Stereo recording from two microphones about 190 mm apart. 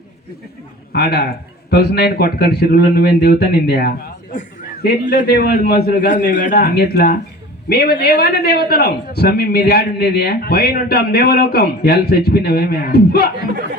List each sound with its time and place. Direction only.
0.9 s a man's voice: 60° left (ahead or behind)